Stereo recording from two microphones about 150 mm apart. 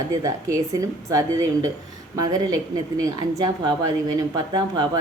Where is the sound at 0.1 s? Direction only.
25° right (ahead or behind).